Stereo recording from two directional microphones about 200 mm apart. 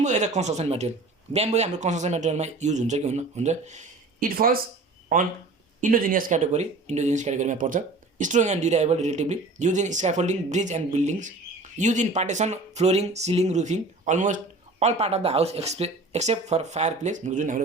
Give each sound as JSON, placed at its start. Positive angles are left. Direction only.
{"t": 0.0, "sound": "speech", "side_deg": -35}